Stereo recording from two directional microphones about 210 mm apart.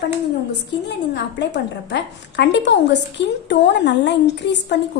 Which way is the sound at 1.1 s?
55° left (ahead or behind).